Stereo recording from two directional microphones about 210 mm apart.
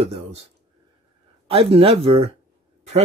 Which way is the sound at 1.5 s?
25° right (ahead or behind).